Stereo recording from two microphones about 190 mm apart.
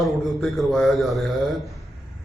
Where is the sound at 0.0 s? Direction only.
Centre (ahead or behind).